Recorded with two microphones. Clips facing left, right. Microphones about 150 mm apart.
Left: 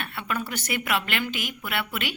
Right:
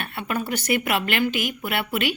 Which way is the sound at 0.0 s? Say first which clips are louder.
Right 3 dB; 45° right (ahead or behind).